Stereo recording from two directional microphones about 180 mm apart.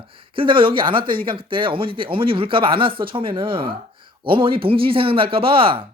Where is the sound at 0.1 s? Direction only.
30° right (ahead or behind).